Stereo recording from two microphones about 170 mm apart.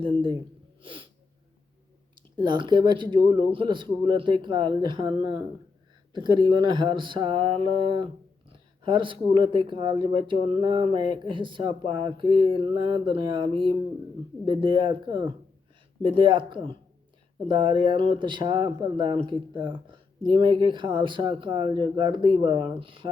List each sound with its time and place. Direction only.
0.8 s sneeze: 30° right (ahead or behind)
2.3 s speech: 25° right (ahead or behind)